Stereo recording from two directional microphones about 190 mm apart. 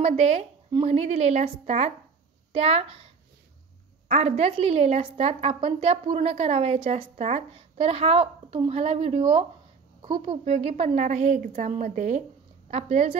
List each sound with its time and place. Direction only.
0.0 s a woman's voice: 35° right (ahead or behind)
4.1 s a woman's voice: 35° right (ahead or behind)